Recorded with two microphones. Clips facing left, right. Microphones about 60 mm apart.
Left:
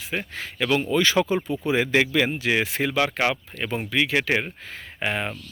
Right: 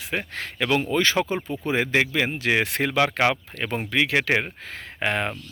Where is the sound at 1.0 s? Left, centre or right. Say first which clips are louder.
Left 2 dB; right.